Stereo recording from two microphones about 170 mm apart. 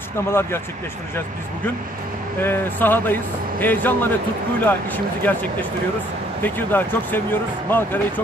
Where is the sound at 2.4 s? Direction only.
10° left (ahead or behind).